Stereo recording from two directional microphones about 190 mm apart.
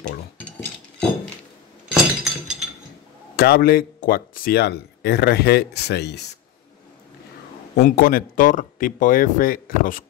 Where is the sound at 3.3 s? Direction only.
55° left (ahead or behind).